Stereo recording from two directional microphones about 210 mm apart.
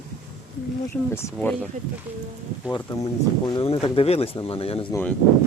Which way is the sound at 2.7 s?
20° left (ahead or behind).